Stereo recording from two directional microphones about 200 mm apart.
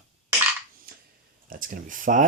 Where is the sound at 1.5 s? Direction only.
45° right (ahead or behind).